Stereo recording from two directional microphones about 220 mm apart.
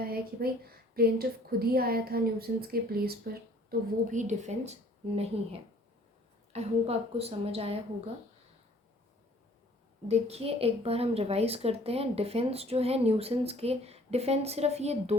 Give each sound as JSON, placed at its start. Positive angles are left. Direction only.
{"t": 0.1, "sound": "a woman's voice", "side_deg": -45}
{"t": 6.5, "sound": "a woman's voice", "side_deg": -30}
{"t": 10.1, "sound": "a woman's voice", "side_deg": -30}